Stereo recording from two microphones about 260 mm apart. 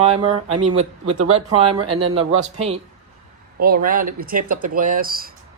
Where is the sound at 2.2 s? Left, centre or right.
Right.